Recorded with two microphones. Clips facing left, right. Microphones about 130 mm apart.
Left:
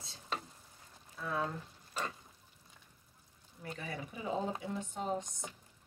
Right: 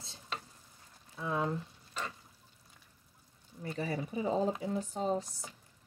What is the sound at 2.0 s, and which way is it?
Pour, 10° left (ahead or behind).